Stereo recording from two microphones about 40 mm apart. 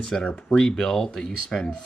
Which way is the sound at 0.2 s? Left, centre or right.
Left.